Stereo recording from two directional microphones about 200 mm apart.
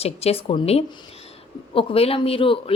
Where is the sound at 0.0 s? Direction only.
30° left (ahead or behind).